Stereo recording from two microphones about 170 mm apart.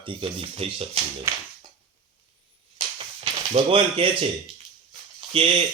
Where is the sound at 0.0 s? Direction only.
30° right (ahead or behind).